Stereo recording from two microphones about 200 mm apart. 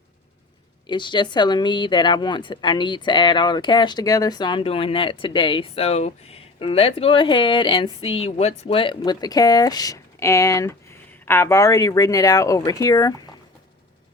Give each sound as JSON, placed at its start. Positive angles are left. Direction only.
{"t": 0.9, "sound": "speech", "side_deg": 25}